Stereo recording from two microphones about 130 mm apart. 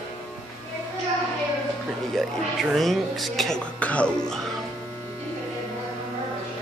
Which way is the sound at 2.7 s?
Centre (ahead or behind).